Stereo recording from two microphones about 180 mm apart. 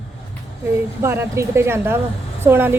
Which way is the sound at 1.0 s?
15° right (ahead or behind).